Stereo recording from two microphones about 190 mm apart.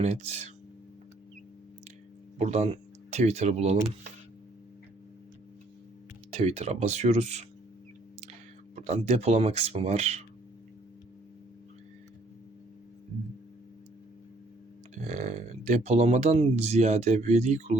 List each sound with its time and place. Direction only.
0.0 s speech: 35° right (ahead or behind)
2.4 s speech: 35° right (ahead or behind)
6.3 s speech: 35° right (ahead or behind)
8.7 s speech: 35° right (ahead or behind)
14.9 s speech: 35° right (ahead or behind)